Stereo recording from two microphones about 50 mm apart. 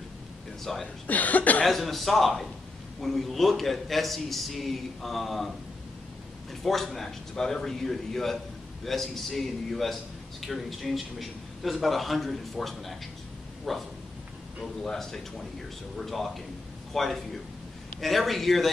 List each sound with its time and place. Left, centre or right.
0.7 s a man's voice: centre
1.0 s speech: left
1.6 s a man's voice: centre
6.6 s a man's voice: centre